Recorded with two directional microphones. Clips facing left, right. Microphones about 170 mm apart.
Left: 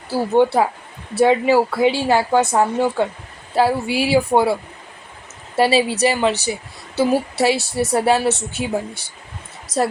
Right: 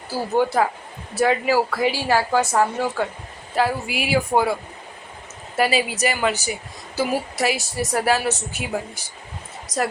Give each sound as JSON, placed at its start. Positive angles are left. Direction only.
{"t": 0.4, "sound": "a woman's voice", "side_deg": 25}
{"t": 5.5, "sound": "a woman's voice", "side_deg": 30}